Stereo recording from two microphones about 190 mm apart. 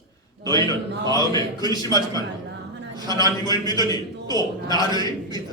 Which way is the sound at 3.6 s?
20° right (ahead or behind).